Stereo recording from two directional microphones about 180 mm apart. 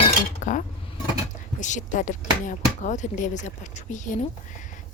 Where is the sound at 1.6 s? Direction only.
40° left (ahead or behind).